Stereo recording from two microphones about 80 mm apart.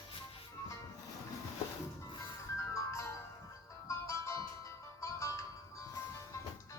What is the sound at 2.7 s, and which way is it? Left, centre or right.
Music, left.